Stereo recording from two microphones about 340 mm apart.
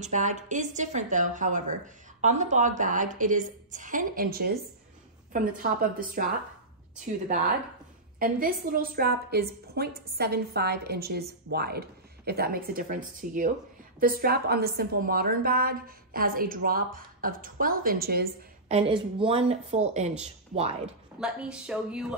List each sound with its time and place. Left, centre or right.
0.0 s a woman's voice: right
8.2 s a woman's voice: right
21.2 s speech: centre